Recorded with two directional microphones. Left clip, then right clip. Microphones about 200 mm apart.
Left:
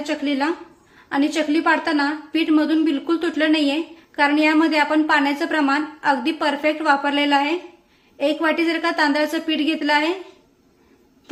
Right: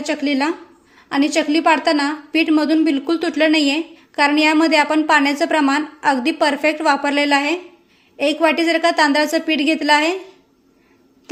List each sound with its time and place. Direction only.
0.0 s a woman's voice: 30° right (ahead or behind)